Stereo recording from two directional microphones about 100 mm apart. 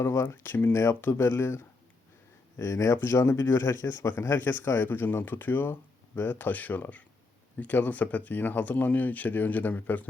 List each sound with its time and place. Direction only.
0.0 s speech: 25° left (ahead or behind)